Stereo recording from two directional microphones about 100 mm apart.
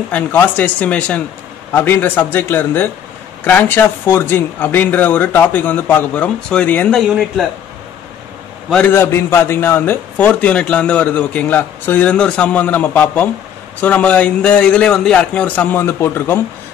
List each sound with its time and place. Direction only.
0.1 s a man's voice: 15° left (ahead or behind)
6.9 s speech: centre (ahead or behind)
8.9 s a man's voice: 25° left (ahead or behind)